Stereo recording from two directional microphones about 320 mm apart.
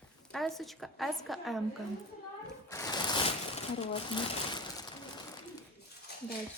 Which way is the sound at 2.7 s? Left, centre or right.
Centre.